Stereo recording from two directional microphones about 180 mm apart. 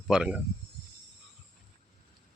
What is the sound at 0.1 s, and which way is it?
Speech, 5° right (ahead or behind).